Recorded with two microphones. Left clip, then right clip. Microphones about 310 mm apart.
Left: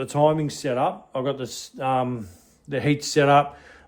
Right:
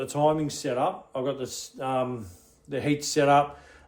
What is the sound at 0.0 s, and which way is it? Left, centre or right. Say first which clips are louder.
Speech: left 4 dB; left.